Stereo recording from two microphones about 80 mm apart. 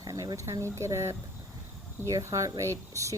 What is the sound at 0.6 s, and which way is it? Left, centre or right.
Speech, right.